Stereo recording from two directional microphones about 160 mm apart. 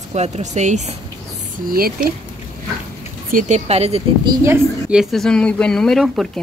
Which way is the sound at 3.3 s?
55° right (ahead or behind).